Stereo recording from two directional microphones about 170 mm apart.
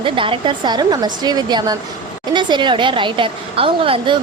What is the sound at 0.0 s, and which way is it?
A woman's voice, 30° right (ahead or behind).